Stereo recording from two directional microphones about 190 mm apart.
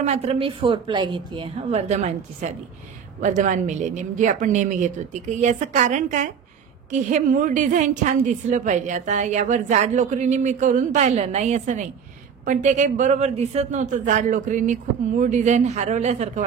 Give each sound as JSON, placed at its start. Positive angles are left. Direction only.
{"t": 0.0, "sound": "a woman's voice", "side_deg": -35}